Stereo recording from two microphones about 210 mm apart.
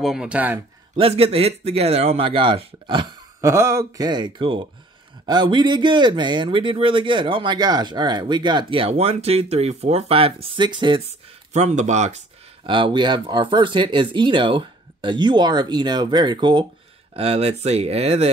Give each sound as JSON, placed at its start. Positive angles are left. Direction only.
{"t": 0.0, "sound": "speech", "side_deg": -5}
{"t": 0.9, "sound": "speech", "side_deg": -25}
{"t": 12.6, "sound": "speech", "side_deg": -20}